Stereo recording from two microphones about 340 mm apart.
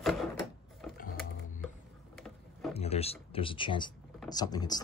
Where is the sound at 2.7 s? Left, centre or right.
Centre.